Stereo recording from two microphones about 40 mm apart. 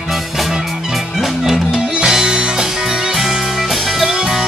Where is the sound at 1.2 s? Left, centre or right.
Centre.